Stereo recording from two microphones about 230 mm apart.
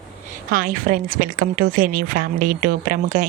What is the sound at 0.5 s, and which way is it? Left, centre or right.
A woman's voice, right.